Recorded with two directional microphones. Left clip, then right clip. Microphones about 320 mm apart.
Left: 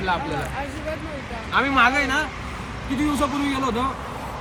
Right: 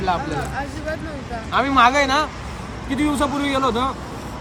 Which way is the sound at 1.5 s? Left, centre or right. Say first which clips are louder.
Right 3 dB; right.